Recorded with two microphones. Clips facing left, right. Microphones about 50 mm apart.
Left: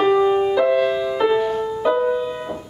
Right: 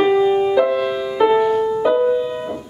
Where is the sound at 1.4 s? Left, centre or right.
Right.